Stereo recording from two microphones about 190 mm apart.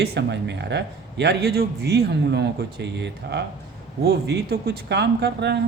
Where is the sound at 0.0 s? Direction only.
60° right (ahead or behind).